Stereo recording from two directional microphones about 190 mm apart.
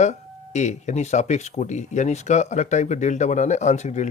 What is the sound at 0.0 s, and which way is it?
Speech, 40° left (ahead or behind).